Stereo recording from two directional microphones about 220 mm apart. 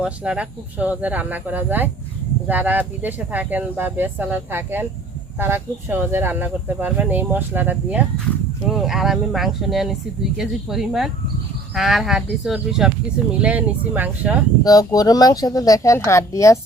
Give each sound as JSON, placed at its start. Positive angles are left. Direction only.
{"t": 0.0, "sound": "speech", "side_deg": -5}
{"t": 14.6, "sound": "speech", "side_deg": 15}